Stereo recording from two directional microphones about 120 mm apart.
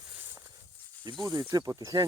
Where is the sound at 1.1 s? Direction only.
35° right (ahead or behind).